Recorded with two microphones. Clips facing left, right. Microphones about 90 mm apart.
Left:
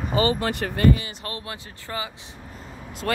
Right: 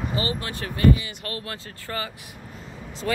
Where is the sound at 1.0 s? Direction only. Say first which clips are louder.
Even; 25° left (ahead or behind).